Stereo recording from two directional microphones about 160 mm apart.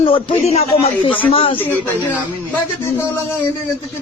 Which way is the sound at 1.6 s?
10° left (ahead or behind).